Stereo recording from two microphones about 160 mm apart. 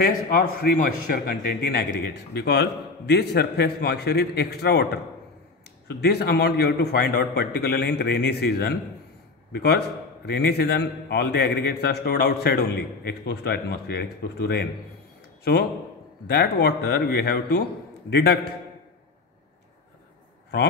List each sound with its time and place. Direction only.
0.3 s a man's voice: 60° left (ahead or behind); by 4.8 s 90° left
5.9 s a man's voice: 90° left
16.3 s a man's voice: 90° left